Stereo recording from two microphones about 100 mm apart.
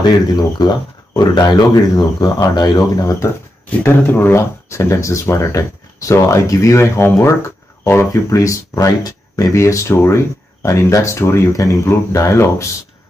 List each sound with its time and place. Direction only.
0.0 s speech: 45° left (ahead or behind)
3.8 s speech: 20° left (ahead or behind)